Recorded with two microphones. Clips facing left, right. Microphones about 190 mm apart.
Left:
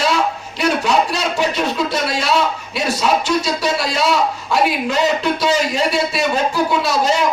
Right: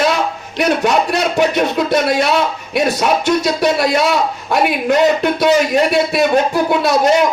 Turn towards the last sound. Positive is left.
turn(degrees=-60)  # may be behind; listen again after turning